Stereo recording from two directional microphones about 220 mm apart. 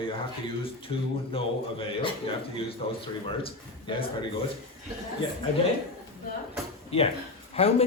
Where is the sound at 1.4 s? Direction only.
25° left (ahead or behind).